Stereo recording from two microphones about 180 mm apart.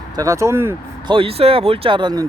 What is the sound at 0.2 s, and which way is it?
Speech, 15° right (ahead or behind).